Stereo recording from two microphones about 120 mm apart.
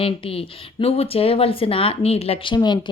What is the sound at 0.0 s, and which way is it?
Speech, 50° left (ahead or behind).